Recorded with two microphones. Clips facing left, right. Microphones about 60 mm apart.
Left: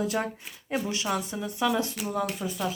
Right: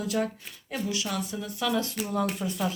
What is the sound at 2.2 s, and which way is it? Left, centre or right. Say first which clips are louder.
Speech: right 1 dB; centre.